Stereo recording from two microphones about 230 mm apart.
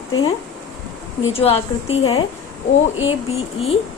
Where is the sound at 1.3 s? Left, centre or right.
Left.